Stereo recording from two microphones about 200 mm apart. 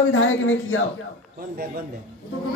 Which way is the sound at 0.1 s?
75° left (ahead or behind).